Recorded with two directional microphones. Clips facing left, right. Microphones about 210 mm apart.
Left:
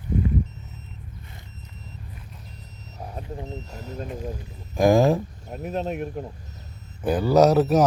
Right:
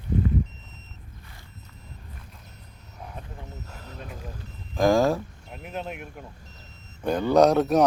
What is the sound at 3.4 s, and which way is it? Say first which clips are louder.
Vehicle: left 7 dB; 15° left (ahead or behind).